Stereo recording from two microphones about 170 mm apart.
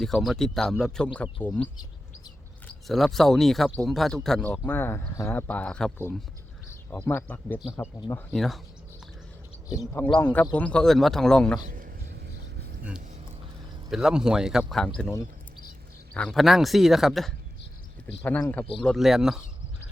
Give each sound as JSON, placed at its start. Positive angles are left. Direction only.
{"t": 0.0, "sound": "speech", "side_deg": 0}
{"t": 2.8, "sound": "speech", "side_deg": 0}
{"t": 8.3, "sound": "speech", "side_deg": 0}
{"t": 9.6, "sound": "speech", "side_deg": 20}
{"t": 11.6, "sound": "a sound", "side_deg": -50}
{"t": 13.9, "sound": "speech", "side_deg": -5}
{"t": 16.1, "sound": "speech", "side_deg": 5}